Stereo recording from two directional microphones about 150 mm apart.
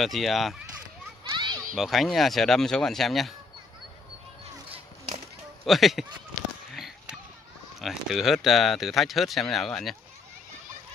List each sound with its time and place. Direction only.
0.0 s speech: centre (ahead or behind)
1.3 s a sound: 30° right (ahead or behind)
1.8 s speech: centre (ahead or behind)
5.7 s speech: centre (ahead or behind)
6.7 s a sound: centre (ahead or behind)
7.8 s speech: centre (ahead or behind)